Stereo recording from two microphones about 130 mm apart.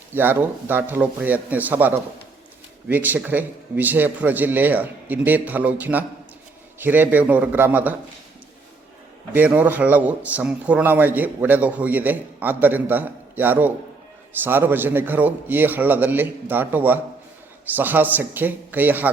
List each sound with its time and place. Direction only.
0.1 s a man's voice: 15° right (ahead or behind)
9.3 s a man's voice: 10° right (ahead or behind)